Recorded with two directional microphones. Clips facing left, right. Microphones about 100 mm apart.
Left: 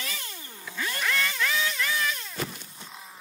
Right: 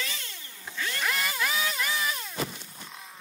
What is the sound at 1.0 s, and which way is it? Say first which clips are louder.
Vehicle: left 1 dB; 10° right (ahead or behind).